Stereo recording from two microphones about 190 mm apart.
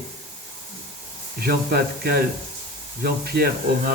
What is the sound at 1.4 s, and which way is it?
Speech, 55° right (ahead or behind).